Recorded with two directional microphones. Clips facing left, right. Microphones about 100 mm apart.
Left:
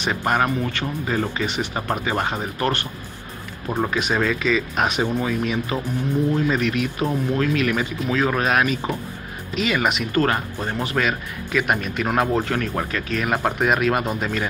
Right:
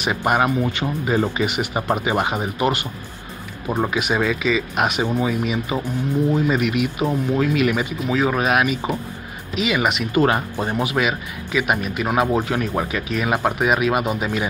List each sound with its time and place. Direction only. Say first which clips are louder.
0.0 s speech: right 2 dB; 10° right (ahead or behind)
10.1 s speech: right 3 dB; 15° right (ahead or behind)